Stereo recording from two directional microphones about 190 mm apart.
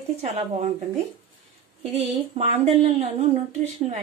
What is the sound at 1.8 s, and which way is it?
A woman's voice, 35° right (ahead or behind).